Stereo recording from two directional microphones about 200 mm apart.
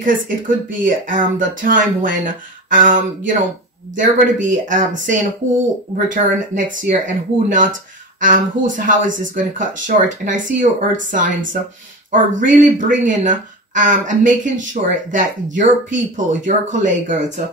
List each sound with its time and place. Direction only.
0.0 s speech: 40° right (ahead or behind)